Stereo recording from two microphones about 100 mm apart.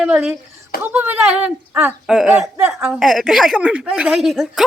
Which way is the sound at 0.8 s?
20° right (ahead or behind).